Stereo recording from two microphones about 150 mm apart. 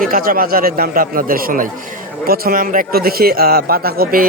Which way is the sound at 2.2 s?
80° right.